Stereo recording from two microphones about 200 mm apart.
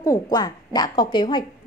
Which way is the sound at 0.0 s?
15° left (ahead or behind).